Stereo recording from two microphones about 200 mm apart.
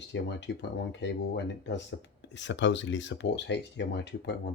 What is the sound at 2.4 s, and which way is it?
Speech, 65° left (ahead or behind).